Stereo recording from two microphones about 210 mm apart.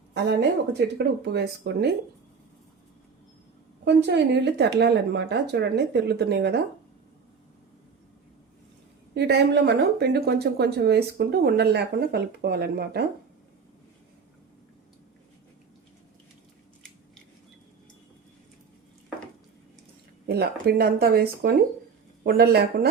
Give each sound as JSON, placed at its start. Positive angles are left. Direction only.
{"t": 0.1, "sound": "speech", "side_deg": -55}
{"t": 3.8, "sound": "speech", "side_deg": -55}
{"t": 9.1, "sound": "speech", "side_deg": -55}
{"t": 20.2, "sound": "speech", "side_deg": -50}